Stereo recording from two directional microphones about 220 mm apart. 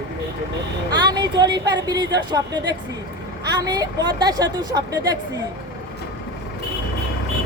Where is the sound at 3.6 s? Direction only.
15° right (ahead or behind).